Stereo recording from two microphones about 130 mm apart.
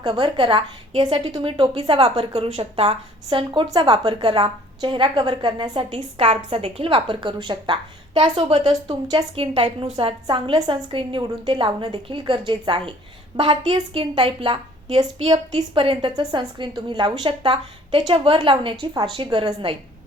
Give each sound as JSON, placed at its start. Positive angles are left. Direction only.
{"t": 0.0, "sound": "a woman's voice", "side_deg": -35}